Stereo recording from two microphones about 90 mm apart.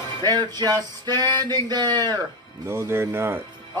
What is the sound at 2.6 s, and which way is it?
Speech, 30° right (ahead or behind).